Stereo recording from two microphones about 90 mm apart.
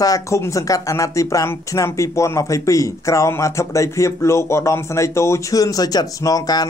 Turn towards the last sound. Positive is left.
turn(degrees=45)  # may be behind; listen again after turning